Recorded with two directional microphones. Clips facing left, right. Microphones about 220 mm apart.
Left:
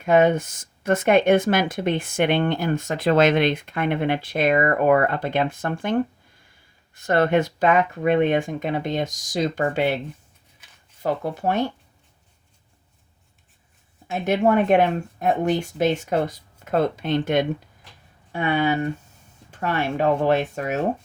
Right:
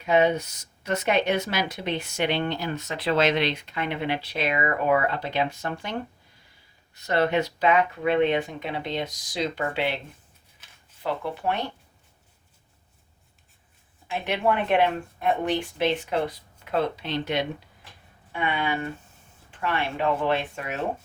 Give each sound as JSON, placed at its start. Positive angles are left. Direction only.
{"t": 0.0, "sound": "speech", "side_deg": 50}
{"t": 11.0, "sound": "speech", "side_deg": 45}
{"t": 14.1, "sound": "speech", "side_deg": 45}